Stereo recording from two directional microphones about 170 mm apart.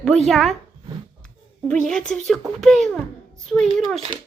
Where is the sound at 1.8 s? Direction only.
5° left (ahead or behind).